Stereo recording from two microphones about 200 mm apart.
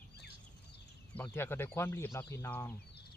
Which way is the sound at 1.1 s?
10° left (ahead or behind).